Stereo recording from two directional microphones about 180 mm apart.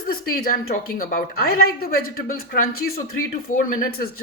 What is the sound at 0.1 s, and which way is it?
A woman's voice, 55° left (ahead or behind).